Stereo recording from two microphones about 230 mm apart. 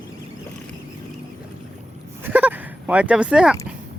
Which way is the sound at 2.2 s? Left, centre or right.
Centre.